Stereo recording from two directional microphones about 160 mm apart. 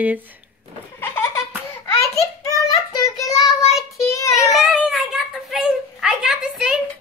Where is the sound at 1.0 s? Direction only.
15° left (ahead or behind).